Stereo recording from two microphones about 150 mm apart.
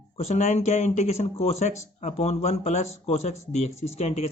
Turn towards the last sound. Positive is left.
turn(degrees=45)  # may be behind; listen again after turning